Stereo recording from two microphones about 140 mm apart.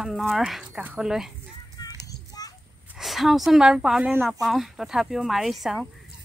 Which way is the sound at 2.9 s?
Centre (ahead or behind).